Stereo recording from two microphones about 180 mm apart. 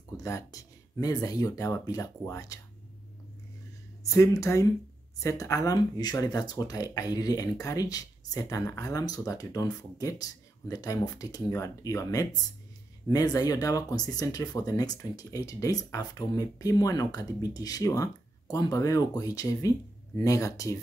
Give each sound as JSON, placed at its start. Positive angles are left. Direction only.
{"t": 0.2, "sound": "speech", "side_deg": 20}
{"t": 4.1, "sound": "speech", "side_deg": 15}